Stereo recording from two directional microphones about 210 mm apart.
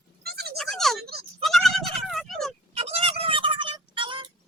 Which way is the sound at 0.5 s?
Centre (ahead or behind).